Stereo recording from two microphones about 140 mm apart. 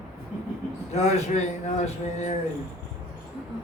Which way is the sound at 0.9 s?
55° left (ahead or behind).